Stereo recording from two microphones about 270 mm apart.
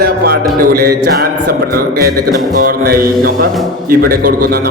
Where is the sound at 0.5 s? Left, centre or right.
Right.